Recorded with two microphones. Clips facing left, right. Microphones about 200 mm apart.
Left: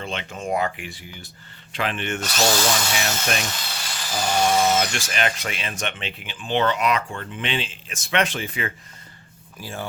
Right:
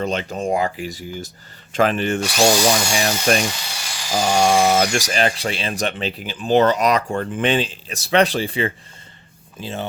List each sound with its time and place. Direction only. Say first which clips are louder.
0.0 s speech: right 8 dB; 40° right (ahead or behind)
2.2 s speech: right 5 dB; 10° right (ahead or behind)
3.4 s a sound: right 5 dB; 10° right (ahead or behind)
4.4 s speech: right 3 dB; 80° right
4.8 s speech: right 6 dB; 40° right (ahead or behind); by 9.8 s 20° right (ahead or behind)